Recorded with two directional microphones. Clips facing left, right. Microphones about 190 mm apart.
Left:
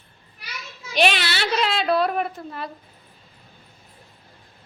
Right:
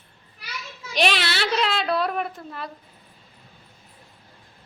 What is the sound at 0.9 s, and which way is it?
A woman's voice, centre (ahead or behind).